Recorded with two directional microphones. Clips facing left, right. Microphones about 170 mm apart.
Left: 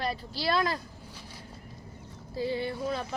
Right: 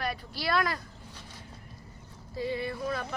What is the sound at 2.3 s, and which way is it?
Speech, 30° left (ahead or behind).